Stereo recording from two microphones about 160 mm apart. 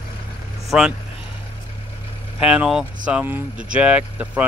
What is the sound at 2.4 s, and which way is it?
Speech, 5° right (ahead or behind).